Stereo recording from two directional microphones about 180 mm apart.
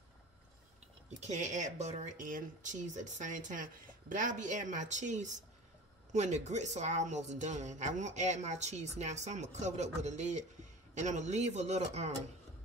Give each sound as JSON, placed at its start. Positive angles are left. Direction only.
{"t": 1.2, "sound": "speech", "side_deg": -40}